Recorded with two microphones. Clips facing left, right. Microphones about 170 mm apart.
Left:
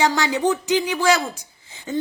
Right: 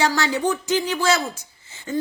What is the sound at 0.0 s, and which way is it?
A woman's voice, 20° left (ahead or behind).